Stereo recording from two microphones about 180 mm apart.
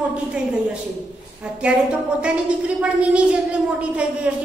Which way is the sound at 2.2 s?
5° right (ahead or behind).